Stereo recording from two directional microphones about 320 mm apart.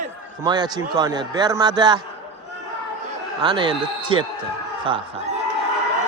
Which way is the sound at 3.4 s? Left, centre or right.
Centre.